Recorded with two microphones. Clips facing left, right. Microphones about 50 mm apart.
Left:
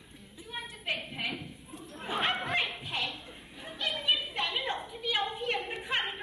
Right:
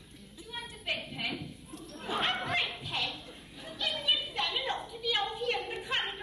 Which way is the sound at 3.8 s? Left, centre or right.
Centre.